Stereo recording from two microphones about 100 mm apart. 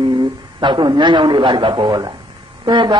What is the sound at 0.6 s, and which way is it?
A man's voice, 50° right (ahead or behind).